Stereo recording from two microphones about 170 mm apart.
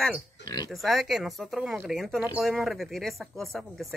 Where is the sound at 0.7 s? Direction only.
Centre (ahead or behind).